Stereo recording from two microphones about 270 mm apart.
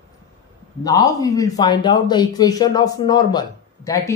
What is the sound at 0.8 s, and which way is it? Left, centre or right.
A man's voice, centre.